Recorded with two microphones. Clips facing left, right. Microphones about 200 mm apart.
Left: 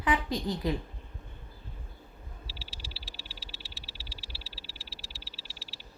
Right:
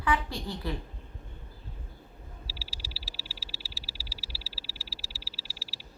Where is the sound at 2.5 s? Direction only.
Centre (ahead or behind).